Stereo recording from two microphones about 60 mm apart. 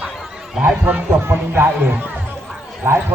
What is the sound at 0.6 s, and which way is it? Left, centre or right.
A man's voice, right.